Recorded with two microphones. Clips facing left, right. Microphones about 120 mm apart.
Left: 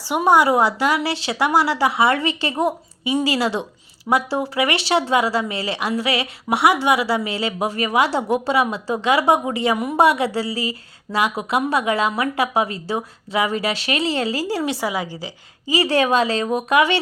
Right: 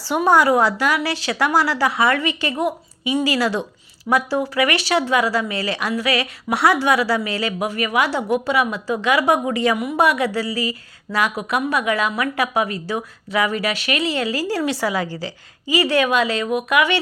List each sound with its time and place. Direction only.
0.2 s a woman's voice: 20° left (ahead or behind)
15.6 s a woman's voice: 30° left (ahead or behind)